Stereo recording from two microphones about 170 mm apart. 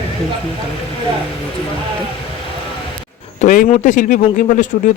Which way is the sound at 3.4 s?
45° left (ahead or behind).